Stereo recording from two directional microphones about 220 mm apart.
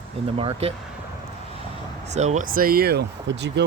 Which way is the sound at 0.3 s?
25° right (ahead or behind).